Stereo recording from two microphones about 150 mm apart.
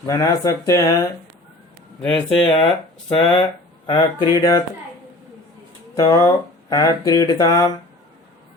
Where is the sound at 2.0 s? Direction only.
5° left (ahead or behind).